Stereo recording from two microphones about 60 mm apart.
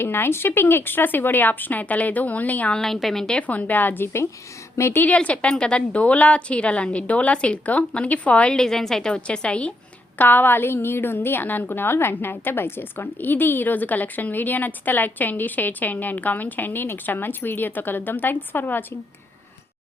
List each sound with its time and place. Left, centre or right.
0.0 s a woman's voice: left
2.7 s a woman's voice: centre
3.4 s a woman's voice: left
4.9 s a woman's voice: left
10.2 s a woman's voice: left